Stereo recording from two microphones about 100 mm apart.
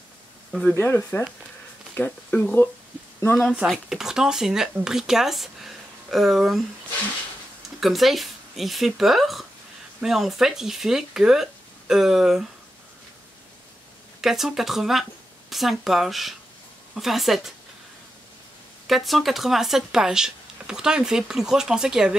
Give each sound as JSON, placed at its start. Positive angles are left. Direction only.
{"t": 0.5, "sound": "speech", "side_deg": 0}
{"t": 0.7, "sound": "speech", "side_deg": 25}
{"t": 3.6, "sound": "speech", "side_deg": -5}
{"t": 7.8, "sound": "speech", "side_deg": 0}
{"t": 14.2, "sound": "speech", "side_deg": -5}
{"t": 18.9, "sound": "speech", "side_deg": 0}